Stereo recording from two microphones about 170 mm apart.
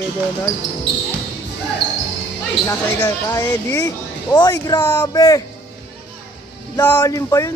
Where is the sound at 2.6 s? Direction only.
20° left (ahead or behind).